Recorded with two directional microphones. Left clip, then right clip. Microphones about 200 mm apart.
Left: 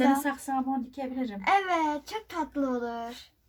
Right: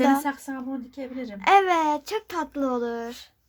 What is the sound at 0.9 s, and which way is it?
Speech, 40° right (ahead or behind).